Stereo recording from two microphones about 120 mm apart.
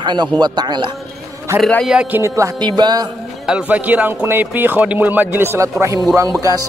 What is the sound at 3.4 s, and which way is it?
Speech, 5° right (ahead or behind).